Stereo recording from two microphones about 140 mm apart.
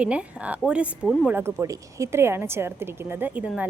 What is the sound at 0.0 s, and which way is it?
A woman's voice, 10° right (ahead or behind).